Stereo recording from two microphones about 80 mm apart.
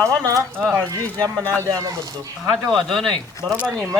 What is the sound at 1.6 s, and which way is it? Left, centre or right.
Speech, right.